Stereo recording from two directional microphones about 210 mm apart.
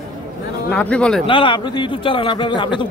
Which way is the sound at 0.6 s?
5° left (ahead or behind).